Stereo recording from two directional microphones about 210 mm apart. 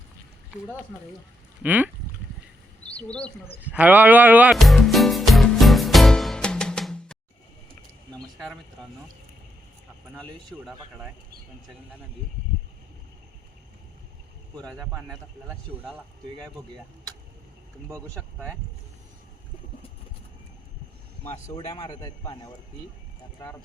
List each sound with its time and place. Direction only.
1.6 s a man's voice: 10° right (ahead or behind)
2.9 s speech: 5° left (ahead or behind)
3.6 s music: 5° right (ahead or behind)
8.4 s speech: centre (ahead or behind)
10.5 s speech: 5° right (ahead or behind)
14.8 s a man's voice: 5° right (ahead or behind)
21.2 s a man's voice: 15° left (ahead or behind)